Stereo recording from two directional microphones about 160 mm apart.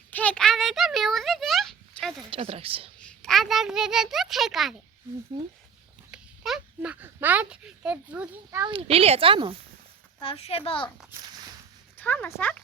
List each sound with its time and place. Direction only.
0.1 s a sound: 10° left (ahead or behind)
2.3 s speech: 35° right (ahead or behind)
3.0 s a child's voice: 5° left (ahead or behind)
6.1 s speech: 5° right (ahead or behind)
8.6 s speech: 35° right (ahead or behind)
10.2 s speech: 35° left (ahead or behind)
11.9 s speech: 10° left (ahead or behind)